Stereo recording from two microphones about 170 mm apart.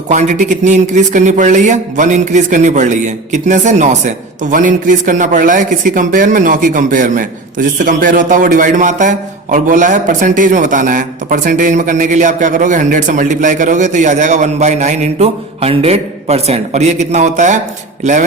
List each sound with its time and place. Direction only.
0.1 s a man's voice: 45° right (ahead or behind)